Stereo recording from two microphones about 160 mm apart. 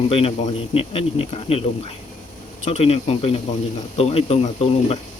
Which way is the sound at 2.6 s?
40° left (ahead or behind).